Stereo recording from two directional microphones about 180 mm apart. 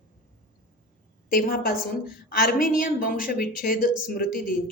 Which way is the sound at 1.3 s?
55° left (ahead or behind).